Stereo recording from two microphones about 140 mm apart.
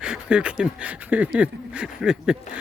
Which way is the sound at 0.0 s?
5° right (ahead or behind).